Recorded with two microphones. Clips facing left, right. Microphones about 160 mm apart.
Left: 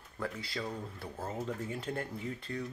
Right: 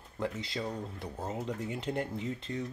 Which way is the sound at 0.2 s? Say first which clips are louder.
Right 3 dB; 20° right (ahead or behind).